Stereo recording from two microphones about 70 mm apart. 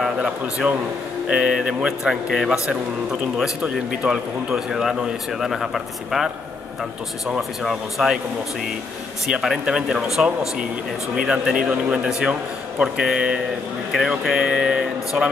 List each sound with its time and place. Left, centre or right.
0.2 s speech: centre
7.6 s speech: centre
9.3 s speech: centre
11.2 s speech: centre